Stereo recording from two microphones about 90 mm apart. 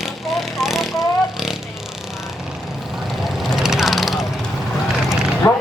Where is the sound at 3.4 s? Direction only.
5° right (ahead or behind).